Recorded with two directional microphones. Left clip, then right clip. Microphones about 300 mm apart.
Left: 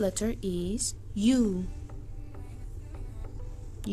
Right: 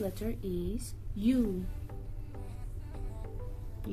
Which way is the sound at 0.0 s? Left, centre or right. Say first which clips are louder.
Left 7 dB; left.